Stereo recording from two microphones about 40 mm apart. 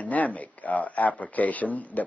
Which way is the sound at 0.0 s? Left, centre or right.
Left.